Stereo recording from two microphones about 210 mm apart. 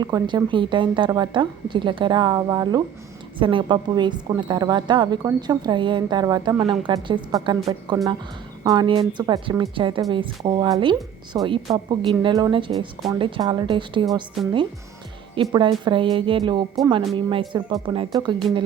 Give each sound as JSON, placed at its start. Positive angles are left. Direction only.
{"t": 0.0, "sound": "speech", "side_deg": -20}